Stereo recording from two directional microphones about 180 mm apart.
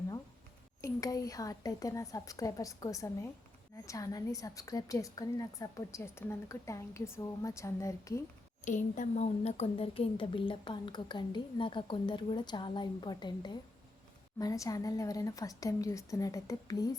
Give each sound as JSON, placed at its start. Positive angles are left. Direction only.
{"t": 0.8, "sound": "a woman's voice", "side_deg": 20}
{"t": 8.6, "sound": "a woman's voice", "side_deg": 45}